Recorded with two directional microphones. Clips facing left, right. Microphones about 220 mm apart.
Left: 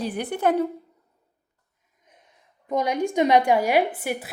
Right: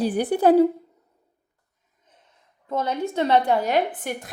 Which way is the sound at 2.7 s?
15° left (ahead or behind).